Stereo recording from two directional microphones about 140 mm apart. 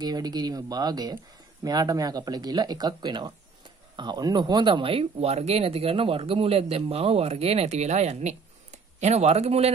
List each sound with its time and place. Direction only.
0.0 s speech: 30° right (ahead or behind); by 9.7 s 50° right (ahead or behind)